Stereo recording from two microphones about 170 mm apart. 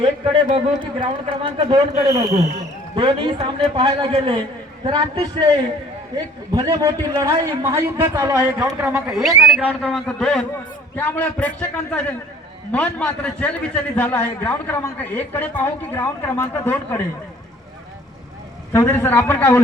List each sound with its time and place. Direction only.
0.0 s a man's voice: 30° right (ahead or behind)
2.9 s a man's voice: 30° right (ahead or behind); by 17.0 s 10° left (ahead or behind)
18.7 s a man's voice: 10° left (ahead or behind)